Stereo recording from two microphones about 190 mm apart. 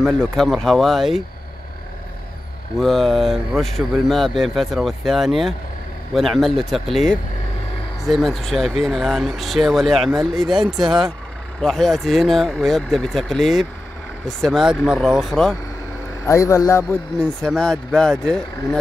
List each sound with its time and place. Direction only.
0.0 s speech: centre (ahead or behind)
2.8 s speech: centre (ahead or behind)
16.3 s speech: 15° left (ahead or behind)